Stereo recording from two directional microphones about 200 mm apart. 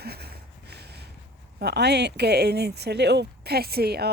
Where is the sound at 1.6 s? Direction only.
55° right (ahead or behind).